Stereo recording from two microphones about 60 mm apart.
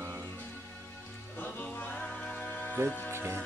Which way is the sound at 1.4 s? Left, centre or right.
Left.